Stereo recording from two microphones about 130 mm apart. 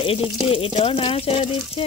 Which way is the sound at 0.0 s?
45° left (ahead or behind).